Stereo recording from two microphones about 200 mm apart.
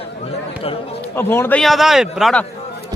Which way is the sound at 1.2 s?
10° left (ahead or behind).